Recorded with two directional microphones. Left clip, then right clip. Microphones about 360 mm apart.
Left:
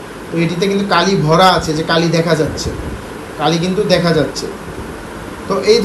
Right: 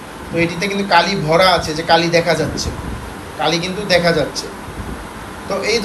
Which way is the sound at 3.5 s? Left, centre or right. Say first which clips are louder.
Left 2 dB; centre.